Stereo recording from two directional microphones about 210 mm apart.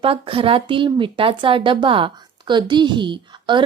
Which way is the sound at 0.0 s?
25° right (ahead or behind).